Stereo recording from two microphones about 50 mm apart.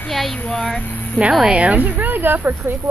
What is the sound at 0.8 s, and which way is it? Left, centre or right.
Speech, left.